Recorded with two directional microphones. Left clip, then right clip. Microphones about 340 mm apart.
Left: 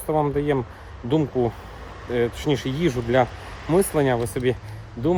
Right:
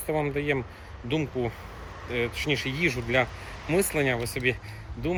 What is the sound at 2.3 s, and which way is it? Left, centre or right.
Speech, centre.